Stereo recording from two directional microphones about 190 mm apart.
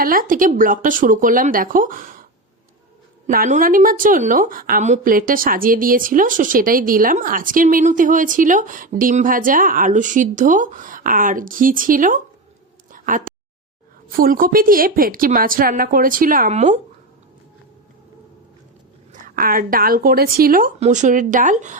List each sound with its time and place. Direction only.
0.0 s a woman's voice: 45° right (ahead or behind)
3.2 s a woman's voice: 45° right (ahead or behind)
12.9 s a sound: 45° right (ahead or behind)
14.1 s a woman's voice: 50° right (ahead or behind)
19.1 s a woman's voice: 50° right (ahead or behind)